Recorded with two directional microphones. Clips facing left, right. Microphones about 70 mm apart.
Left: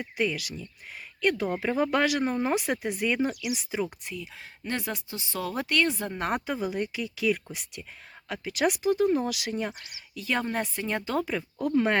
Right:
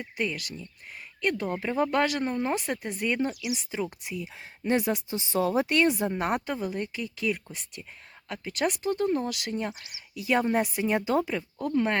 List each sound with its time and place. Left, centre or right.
0.0 s speech: centre
4.0 s speech: centre
6.4 s speech: centre
9.7 s speech: centre
11.3 s speech: centre